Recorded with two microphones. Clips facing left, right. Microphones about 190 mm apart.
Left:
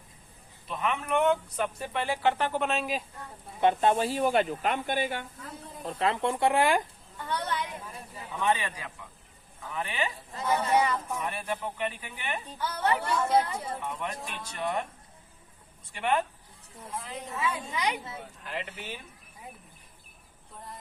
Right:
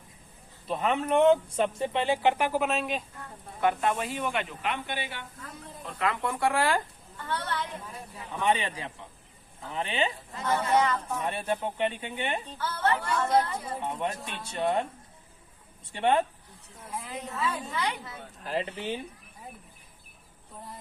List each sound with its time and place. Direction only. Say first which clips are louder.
0.7 s speech: right 3 dB; 35° right (ahead or behind); by 2.5 s 15° right (ahead or behind)
2.5 s speech: right 1 dB; 5° right (ahead or behind)
3.6 s speech: left 3 dB; 25° left (ahead or behind); by 5.2 s 45° left (ahead or behind)
5.8 s speech: left 2 dB; 30° left (ahead or behind)
8.4 s speech: right 1 dB; 20° right (ahead or behind)
10.4 s speech: even; 10° left (ahead or behind)
11.3 s speech: right 4 dB; 25° right (ahead or behind)
12.5 s speech: left 2 dB; 15° left (ahead or behind)
13.8 s speech: right 3 dB; 25° right (ahead or behind)
15.9 s speech: right 3 dB; 30° right (ahead or behind)
16.9 s a woman's voice: right 1 dB; 5° right (ahead or behind)
17.3 s speech: even; 15° left (ahead or behind)
18.4 s speech: right 8 dB; 35° right (ahead or behind)